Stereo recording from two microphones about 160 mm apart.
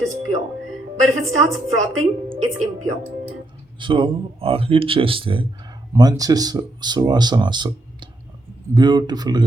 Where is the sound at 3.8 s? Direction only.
30° right (ahead or behind).